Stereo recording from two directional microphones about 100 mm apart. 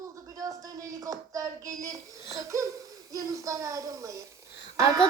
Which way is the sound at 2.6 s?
30° right (ahead or behind).